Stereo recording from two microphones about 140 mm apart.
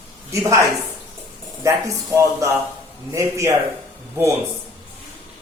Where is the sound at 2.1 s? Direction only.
20° right (ahead or behind).